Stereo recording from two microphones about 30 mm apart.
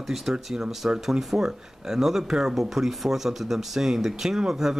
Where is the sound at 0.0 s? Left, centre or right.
Centre.